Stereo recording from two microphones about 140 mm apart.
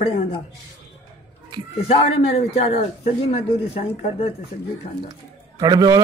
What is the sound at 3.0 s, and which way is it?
Speech, 45° left (ahead or behind).